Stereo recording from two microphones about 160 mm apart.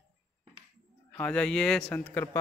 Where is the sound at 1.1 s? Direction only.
5° left (ahead or behind).